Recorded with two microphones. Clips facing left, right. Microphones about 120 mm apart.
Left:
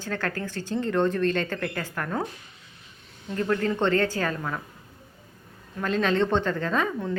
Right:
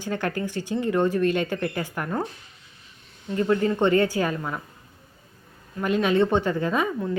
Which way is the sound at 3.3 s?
10° right (ahead or behind).